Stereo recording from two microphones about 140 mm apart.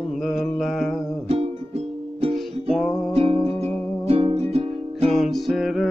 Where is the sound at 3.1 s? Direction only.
45° right (ahead or behind).